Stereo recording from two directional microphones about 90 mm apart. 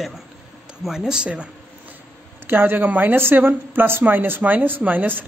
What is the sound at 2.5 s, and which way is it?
Speech, 20° right (ahead or behind).